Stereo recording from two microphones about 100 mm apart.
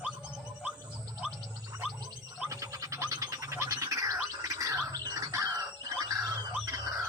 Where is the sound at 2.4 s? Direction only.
35° right (ahead or behind).